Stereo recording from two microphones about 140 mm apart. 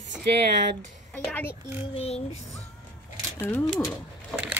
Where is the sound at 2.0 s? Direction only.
50° left (ahead or behind).